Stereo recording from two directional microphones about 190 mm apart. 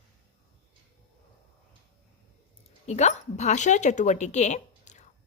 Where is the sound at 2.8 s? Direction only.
35° left (ahead or behind).